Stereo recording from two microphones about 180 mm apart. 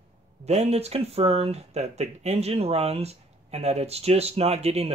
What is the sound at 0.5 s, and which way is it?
Speech, 35° right (ahead or behind).